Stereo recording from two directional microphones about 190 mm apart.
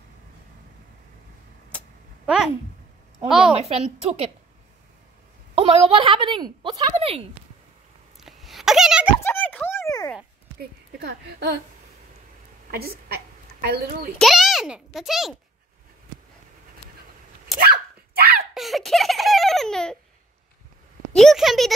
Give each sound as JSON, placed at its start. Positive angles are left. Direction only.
{"t": 2.2, "sound": "a sound", "side_deg": -5}
{"t": 3.3, "sound": "a child's voice", "side_deg": 0}
{"t": 3.5, "sound": "a woman's voice", "side_deg": -35}
{"t": 5.5, "sound": "a woman's voice", "side_deg": -30}
{"t": 8.2, "sound": "a sound", "side_deg": 0}
{"t": 9.2, "sound": "a sound", "side_deg": 10}
{"t": 10.6, "sound": "speech", "side_deg": -60}
{"t": 12.7, "sound": "speech", "side_deg": -55}
{"t": 14.1, "sound": "a child's voice", "side_deg": 0}
{"t": 17.6, "sound": "dog", "side_deg": -55}
{"t": 18.5, "sound": "a sound", "side_deg": 0}
{"t": 21.1, "sound": "speech", "side_deg": 0}